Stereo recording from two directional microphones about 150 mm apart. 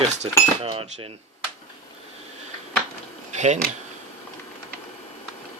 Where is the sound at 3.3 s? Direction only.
50° right (ahead or behind).